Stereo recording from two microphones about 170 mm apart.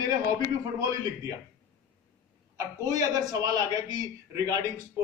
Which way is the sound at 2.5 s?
20° right (ahead or behind).